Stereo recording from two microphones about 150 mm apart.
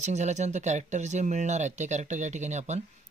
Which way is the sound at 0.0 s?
50° right (ahead or behind).